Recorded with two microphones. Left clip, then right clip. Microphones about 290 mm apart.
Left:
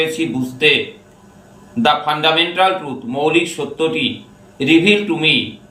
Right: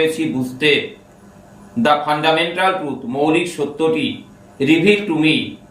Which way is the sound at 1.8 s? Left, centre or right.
Centre.